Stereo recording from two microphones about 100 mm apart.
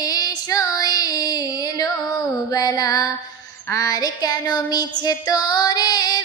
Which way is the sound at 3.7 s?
35° left (ahead or behind).